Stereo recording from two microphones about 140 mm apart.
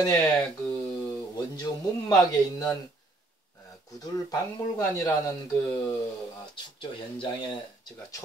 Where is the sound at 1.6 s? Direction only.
25° left (ahead or behind).